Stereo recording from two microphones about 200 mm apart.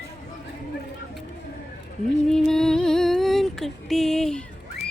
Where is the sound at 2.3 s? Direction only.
5° left (ahead or behind).